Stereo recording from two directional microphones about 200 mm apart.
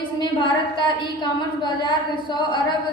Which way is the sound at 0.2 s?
20° left (ahead or behind).